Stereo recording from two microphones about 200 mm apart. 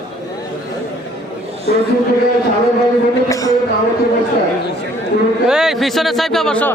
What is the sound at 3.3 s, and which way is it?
Speech, 15° left (ahead or behind).